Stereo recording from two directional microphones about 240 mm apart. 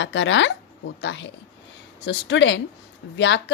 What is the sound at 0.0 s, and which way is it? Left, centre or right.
Speech, left.